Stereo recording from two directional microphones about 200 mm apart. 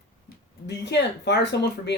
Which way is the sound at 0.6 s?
60° left (ahead or behind).